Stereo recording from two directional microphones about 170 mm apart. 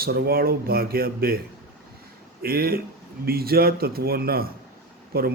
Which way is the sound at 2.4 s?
60° right (ahead or behind).